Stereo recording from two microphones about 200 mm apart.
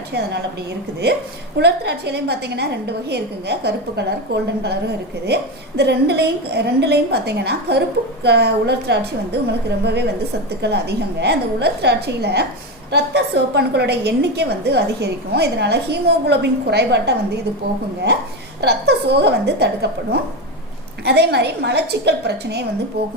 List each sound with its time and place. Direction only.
1.5 s a woman's voice: 55° right (ahead or behind)
18.6 s a woman's voice: 55° right (ahead or behind)
21.0 s a woman's voice: 55° right (ahead or behind)